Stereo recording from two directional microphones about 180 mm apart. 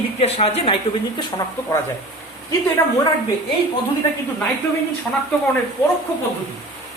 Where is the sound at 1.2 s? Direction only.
20° left (ahead or behind).